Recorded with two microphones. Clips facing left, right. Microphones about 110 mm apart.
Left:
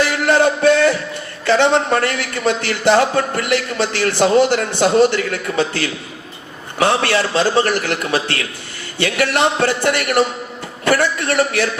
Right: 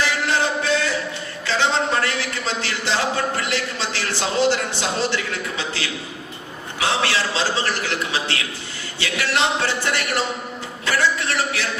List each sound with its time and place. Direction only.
0.0 s music: 55° left (ahead or behind)
1.5 s a man's voice: 55° left (ahead or behind)